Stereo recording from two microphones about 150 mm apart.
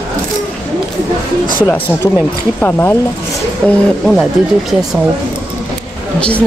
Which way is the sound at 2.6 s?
15° left (ahead or behind).